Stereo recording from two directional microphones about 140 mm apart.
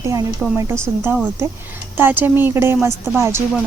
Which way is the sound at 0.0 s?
20° right (ahead or behind).